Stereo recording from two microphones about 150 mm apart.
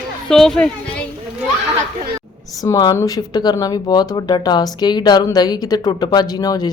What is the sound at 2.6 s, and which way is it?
Speech, 25° left (ahead or behind).